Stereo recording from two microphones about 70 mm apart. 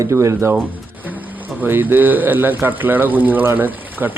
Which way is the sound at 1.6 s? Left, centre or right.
Right.